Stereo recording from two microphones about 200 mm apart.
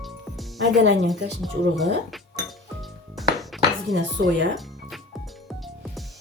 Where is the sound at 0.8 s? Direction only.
60° right (ahead or behind).